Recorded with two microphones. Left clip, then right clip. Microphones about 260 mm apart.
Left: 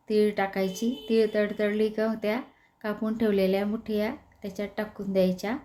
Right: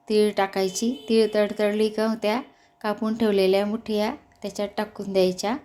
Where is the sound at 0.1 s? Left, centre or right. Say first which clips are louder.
Right 4 dB; centre.